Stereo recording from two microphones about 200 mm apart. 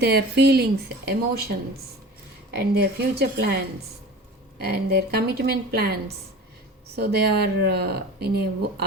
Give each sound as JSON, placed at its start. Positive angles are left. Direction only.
{"t": 0.0, "sound": "a woman's voice", "side_deg": -55}